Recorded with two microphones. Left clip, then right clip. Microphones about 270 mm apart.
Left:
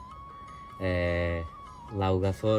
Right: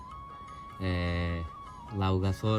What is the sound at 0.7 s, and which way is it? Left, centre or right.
Speech, centre.